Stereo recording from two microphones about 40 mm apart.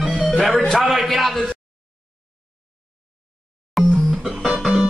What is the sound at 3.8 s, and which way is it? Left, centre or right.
Music, centre.